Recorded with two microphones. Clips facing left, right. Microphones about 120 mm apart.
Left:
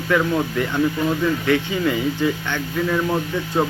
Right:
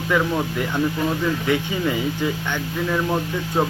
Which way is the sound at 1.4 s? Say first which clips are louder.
Left 2 dB; 15° right (ahead or behind).